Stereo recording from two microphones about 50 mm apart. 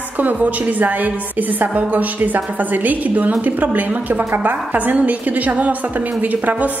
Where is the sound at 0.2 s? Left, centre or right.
Right.